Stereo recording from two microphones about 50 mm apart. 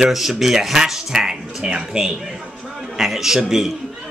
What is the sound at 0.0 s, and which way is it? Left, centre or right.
Speech, centre.